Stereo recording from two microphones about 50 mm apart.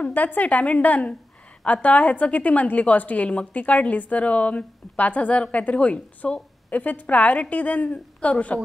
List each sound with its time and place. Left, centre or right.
0.0 s a woman's voice: left